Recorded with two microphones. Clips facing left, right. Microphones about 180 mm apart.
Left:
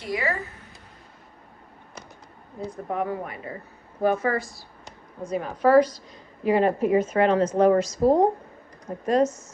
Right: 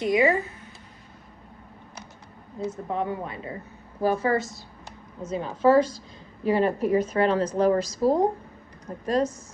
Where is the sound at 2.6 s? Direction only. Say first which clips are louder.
Even; 25° right (ahead or behind).